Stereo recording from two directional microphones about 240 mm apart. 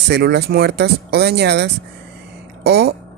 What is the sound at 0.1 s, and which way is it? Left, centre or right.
Speech, right.